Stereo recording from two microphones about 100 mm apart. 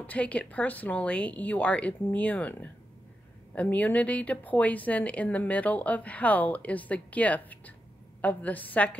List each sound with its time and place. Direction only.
0.0 s speech: 15° left (ahead or behind)